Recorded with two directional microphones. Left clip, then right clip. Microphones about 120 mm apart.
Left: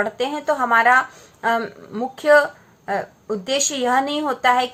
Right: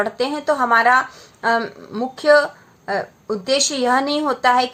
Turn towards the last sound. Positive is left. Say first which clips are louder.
# right 2 dB
turn(degrees=-25)  # may be behind; listen again after turning